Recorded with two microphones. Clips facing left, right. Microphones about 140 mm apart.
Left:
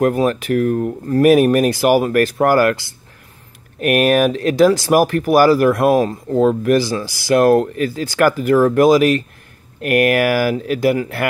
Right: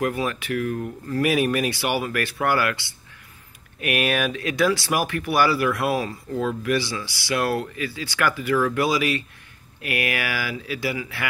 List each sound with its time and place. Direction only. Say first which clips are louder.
0.0 s speech: left 9 dB; 45° left (ahead or behind)
3.8 s speech: left 10 dB; 45° left (ahead or behind)